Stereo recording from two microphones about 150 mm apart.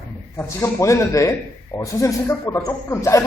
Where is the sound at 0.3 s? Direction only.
20° left (ahead or behind).